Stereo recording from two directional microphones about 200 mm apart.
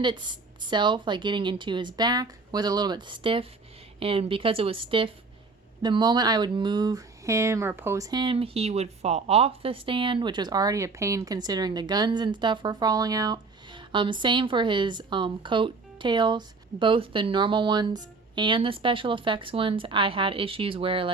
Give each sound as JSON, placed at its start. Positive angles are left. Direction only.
{"t": 0.0, "sound": "speech", "side_deg": -20}